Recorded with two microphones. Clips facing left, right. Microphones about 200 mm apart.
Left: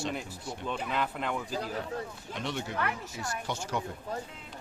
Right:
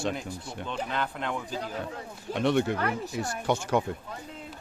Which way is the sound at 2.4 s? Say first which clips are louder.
Right 9 dB; 60° right (ahead or behind).